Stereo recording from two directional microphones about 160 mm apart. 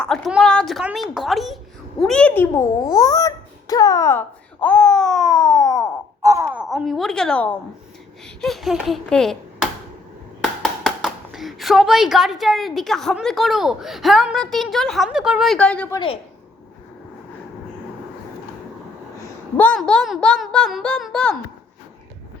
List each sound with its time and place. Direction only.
0.0 s a woman's voice: 5° left (ahead or behind)
6.2 s wail: 20° right (ahead or behind)
6.5 s a woman's voice: 5° right (ahead or behind)
19.5 s speech: 5° left (ahead or behind)